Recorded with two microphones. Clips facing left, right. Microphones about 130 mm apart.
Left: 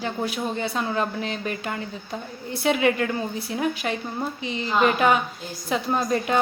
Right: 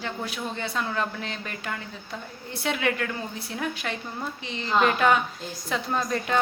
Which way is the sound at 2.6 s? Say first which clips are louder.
Left 6 dB; 15° left (ahead or behind).